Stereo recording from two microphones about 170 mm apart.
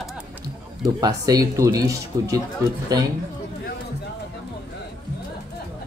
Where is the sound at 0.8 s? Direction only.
20° right (ahead or behind).